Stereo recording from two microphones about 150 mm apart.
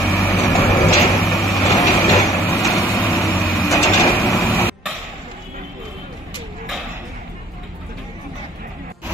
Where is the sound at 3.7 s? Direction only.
20° left (ahead or behind).